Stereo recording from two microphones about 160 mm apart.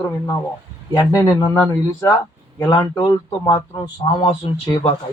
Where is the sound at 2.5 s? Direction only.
25° left (ahead or behind).